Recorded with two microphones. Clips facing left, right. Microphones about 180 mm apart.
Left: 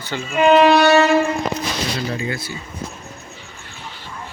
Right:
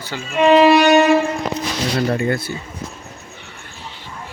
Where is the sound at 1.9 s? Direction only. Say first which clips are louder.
Right 6 dB; 55° right (ahead or behind).